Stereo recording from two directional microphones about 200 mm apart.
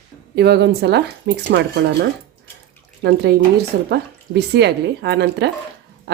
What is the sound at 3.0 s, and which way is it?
Speech, 55° right (ahead or behind).